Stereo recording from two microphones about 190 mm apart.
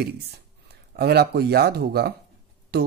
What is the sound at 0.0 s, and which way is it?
Speech, 60° right (ahead or behind).